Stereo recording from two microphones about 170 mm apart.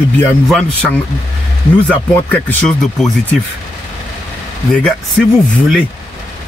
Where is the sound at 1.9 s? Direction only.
10° left (ahead or behind).